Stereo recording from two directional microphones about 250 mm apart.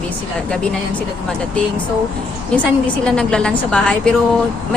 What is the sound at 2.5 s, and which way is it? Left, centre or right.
A woman's voice, centre.